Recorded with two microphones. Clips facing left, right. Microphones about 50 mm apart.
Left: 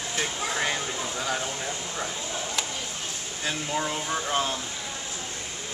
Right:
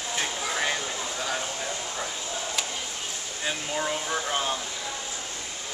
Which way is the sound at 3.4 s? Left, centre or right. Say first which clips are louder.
Even; centre.